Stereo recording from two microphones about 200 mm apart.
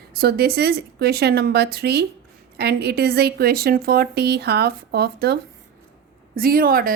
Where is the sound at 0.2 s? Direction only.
50° right (ahead or behind).